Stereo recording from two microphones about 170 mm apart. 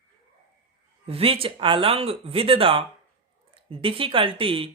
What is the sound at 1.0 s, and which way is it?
Speech, 35° right (ahead or behind).